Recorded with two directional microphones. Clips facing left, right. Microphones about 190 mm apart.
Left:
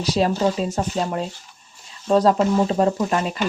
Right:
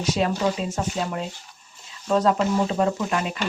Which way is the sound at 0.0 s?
35° left (ahead or behind).